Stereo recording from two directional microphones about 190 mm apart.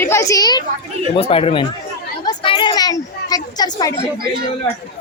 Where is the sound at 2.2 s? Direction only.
25° left (ahead or behind).